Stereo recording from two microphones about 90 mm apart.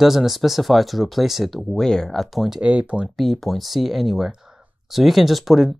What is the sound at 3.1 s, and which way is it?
Speech, centre (ahead or behind).